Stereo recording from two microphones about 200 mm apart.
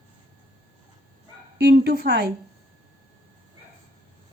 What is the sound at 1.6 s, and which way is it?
Speech, 55° right (ahead or behind).